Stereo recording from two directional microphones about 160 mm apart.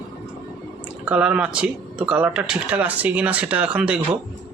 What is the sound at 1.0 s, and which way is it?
Speech, 10° right (ahead or behind).